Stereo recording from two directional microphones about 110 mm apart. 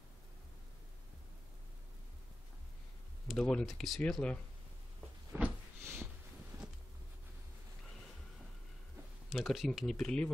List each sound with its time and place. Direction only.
3.3 s speech: 5° left (ahead or behind)
5.3 s a sound: 20° right (ahead or behind)
9.3 s speech: centre (ahead or behind)